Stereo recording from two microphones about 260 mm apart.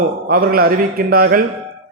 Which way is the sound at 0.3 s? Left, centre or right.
Right.